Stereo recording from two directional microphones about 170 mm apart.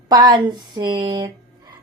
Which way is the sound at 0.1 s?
25° right (ahead or behind).